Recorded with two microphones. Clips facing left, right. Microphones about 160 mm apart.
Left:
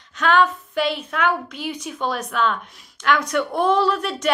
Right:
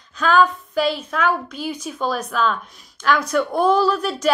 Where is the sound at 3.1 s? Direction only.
30° right (ahead or behind).